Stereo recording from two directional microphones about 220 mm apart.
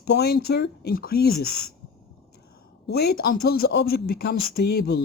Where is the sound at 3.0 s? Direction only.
45° left (ahead or behind).